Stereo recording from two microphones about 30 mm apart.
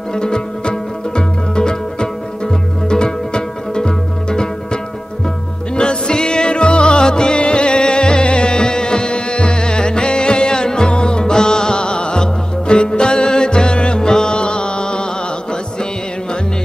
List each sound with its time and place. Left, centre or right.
0.1 s music: left
5.8 s music: left